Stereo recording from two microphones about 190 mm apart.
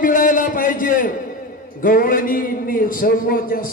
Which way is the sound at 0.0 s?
45° left (ahead or behind).